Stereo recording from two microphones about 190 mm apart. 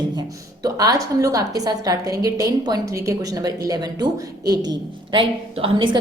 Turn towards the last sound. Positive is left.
turn(degrees=-25)  # may be behind; listen again after turning